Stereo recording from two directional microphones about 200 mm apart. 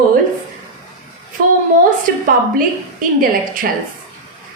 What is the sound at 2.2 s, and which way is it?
A woman's voice, 45° right (ahead or behind).